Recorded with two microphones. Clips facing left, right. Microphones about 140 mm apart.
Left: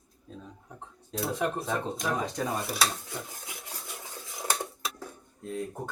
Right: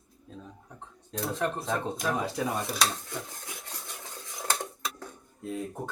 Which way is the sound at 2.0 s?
5° right (ahead or behind).